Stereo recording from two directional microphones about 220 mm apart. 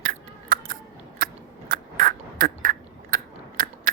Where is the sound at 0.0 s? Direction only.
40° right (ahead or behind).